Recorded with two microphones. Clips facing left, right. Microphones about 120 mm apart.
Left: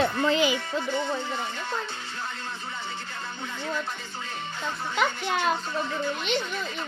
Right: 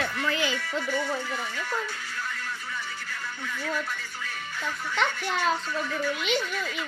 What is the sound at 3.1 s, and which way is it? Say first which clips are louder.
Music: even; 25° left (ahead or behind).